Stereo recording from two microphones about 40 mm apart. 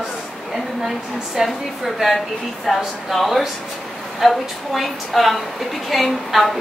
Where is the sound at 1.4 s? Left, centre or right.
Centre.